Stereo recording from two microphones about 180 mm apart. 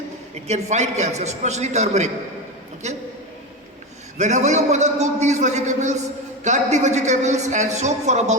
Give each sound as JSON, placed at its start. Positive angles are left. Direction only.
{"t": 0.4, "sound": "a man's voice", "side_deg": -40}
{"t": 4.2, "sound": "a man's voice", "side_deg": -40}